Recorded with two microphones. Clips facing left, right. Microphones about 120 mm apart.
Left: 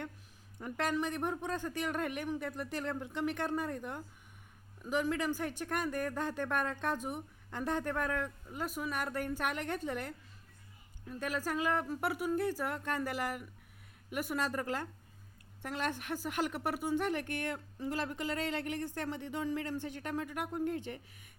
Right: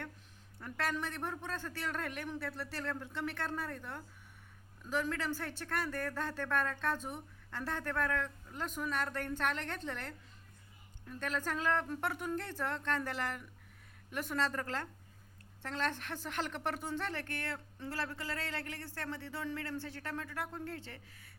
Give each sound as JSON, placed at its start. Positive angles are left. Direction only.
{"t": 0.6, "sound": "speech", "side_deg": 15}